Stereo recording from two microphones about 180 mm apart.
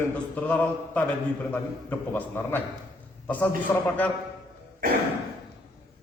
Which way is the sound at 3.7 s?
15° left (ahead or behind).